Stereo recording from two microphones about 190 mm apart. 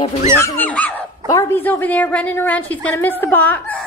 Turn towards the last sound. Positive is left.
turn(degrees=10)  # may be behind; listen again after turning